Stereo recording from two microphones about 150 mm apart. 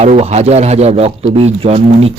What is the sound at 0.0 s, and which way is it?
A man's voice, 45° right (ahead or behind).